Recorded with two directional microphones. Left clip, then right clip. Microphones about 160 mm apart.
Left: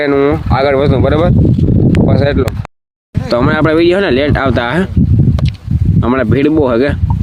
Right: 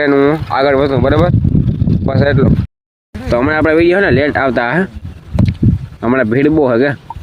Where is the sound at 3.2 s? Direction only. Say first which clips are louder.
Even; 25° left (ahead or behind).